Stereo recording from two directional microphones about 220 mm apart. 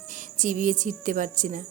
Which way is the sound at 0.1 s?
35° right (ahead or behind).